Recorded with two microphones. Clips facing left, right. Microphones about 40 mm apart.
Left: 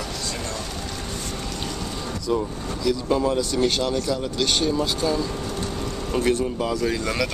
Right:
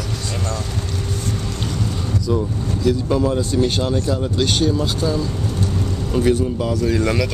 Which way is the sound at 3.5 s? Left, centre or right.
Centre.